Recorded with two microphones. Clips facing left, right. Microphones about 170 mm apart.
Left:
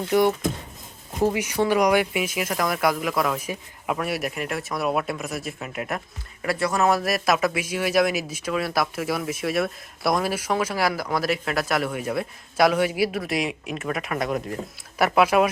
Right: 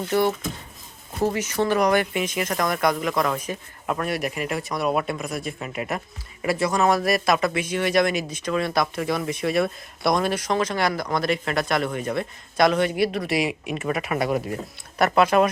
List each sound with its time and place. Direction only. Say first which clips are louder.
0.1 s speech: left 3 dB; 15° left (ahead or behind); by 15.0 s 5° right (ahead or behind)
15.0 s speech: right 1 dB; 5° left (ahead or behind)